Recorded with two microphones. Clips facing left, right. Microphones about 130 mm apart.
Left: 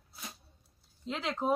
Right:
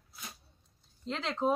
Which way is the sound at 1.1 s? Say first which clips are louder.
Right 1 dB; 5° left (ahead or behind).